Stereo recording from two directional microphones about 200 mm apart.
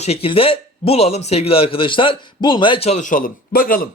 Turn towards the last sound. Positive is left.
turn(degrees=45)  # may be behind; listen again after turning